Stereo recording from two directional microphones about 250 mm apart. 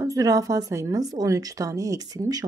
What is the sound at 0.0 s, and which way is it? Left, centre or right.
A woman's voice, centre.